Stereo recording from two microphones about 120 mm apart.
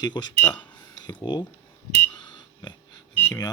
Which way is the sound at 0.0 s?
35° left (ahead or behind).